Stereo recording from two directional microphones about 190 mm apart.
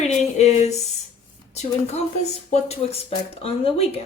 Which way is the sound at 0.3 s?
35° left (ahead or behind).